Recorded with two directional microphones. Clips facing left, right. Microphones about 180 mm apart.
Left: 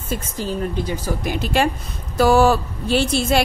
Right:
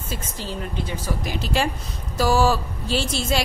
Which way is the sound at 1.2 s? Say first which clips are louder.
Left 5 dB; 55° left (ahead or behind).